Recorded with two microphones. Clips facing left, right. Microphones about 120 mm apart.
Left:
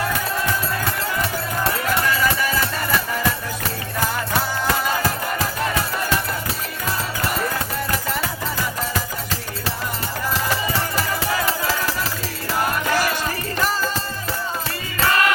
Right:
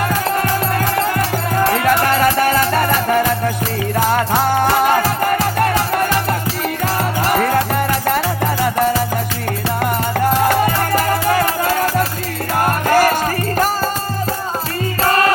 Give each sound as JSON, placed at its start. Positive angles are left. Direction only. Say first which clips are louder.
{"t": 0.0, "sound": "music", "louder": "right 6 dB", "side_deg": -60}
{"t": 7.3, "sound": "music", "louder": "right 10 dB", "side_deg": -65}
{"t": 9.8, "sound": "music", "louder": "right 13 dB", "side_deg": -65}
{"t": 15.0, "sound": "music", "louder": "right 4 dB", "side_deg": -40}